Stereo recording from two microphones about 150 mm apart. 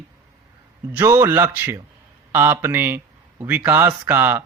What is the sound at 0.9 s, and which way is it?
A man's voice, 15° right (ahead or behind).